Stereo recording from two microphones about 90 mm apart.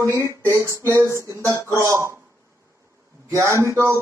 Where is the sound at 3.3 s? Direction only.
35° right (ahead or behind).